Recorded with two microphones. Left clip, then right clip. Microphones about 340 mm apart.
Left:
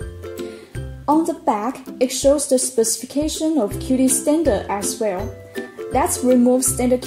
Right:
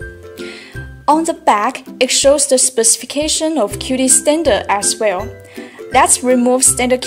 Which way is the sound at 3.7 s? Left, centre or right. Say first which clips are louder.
Right 4 dB; right.